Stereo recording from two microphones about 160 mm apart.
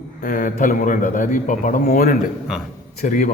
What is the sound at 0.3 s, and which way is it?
A man's voice, 55° left (ahead or behind).